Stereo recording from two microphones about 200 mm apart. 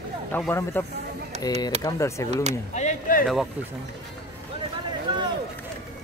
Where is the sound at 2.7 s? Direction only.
35° left (ahead or behind).